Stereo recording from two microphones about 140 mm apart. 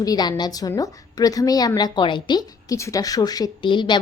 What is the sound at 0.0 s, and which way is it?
A woman's voice, 30° left (ahead or behind).